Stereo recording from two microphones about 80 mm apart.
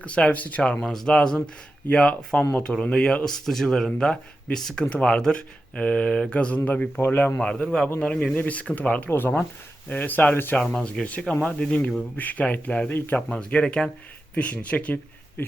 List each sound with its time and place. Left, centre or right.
0.0 s speech: centre
7.0 s speech: left
7.3 s speech: centre